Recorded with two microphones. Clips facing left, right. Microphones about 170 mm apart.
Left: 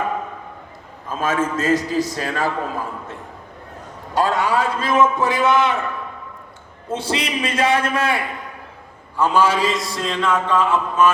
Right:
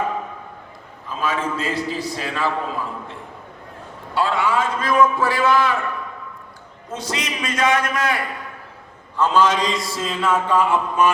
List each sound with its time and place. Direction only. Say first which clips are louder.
1.0 s a man's voice: left 3 dB; 45° left (ahead or behind)
4.1 s a man's voice: left 1 dB; 40° left (ahead or behind)
4.9 s a man's voice: even; 20° left (ahead or behind)
6.9 s a man's voice: left 4 dB; 30° left (ahead or behind)
9.1 s a sound: even; 10° left (ahead or behind); by 11.1 s 10° right (ahead or behind)